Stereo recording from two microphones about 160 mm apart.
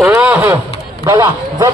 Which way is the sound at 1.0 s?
20° right (ahead or behind).